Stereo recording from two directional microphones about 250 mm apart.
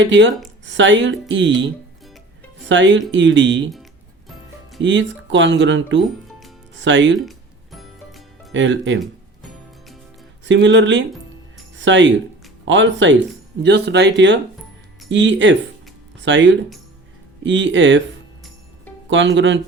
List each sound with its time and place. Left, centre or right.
0.0 s speech: right
2.6 s speech: right
4.8 s speech: right
7.3 s music: centre
8.5 s speech: right
10.4 s speech: right
19.0 s speech: right